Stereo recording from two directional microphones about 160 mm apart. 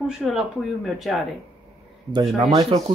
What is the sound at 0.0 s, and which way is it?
Speech, 5° right (ahead or behind).